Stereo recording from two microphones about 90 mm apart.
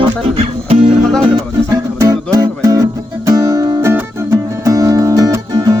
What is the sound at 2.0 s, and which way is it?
Music, 40° right (ahead or behind).